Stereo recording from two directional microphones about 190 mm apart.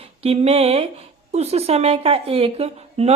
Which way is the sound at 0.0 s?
30° right (ahead or behind).